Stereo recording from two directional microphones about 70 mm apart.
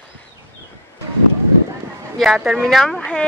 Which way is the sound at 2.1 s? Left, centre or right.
Centre.